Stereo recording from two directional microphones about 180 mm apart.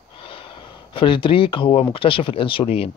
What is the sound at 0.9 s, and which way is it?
Speech, 30° left (ahead or behind).